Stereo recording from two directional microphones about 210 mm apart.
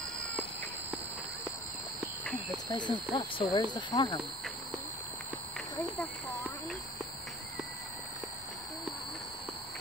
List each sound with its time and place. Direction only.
2.5 s speech: 20° left (ahead or behind)